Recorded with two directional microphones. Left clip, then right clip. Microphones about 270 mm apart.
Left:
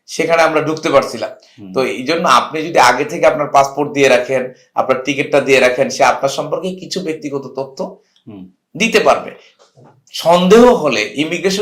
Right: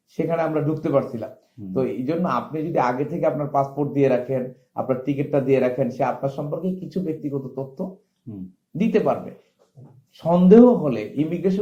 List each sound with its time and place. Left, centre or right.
0.2 s speech: centre
7.6 s speech: centre
8.8 s speech: centre
10.6 s a man's voice: left
10.8 s speech: centre